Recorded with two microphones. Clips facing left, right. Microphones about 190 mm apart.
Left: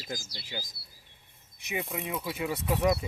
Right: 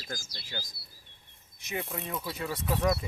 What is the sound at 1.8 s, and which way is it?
Speech, centre (ahead or behind).